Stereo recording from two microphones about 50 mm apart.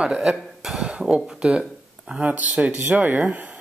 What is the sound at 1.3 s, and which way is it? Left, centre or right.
Speech, centre.